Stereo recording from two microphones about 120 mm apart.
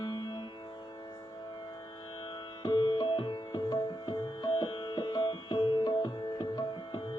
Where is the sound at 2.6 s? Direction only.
40° left (ahead or behind).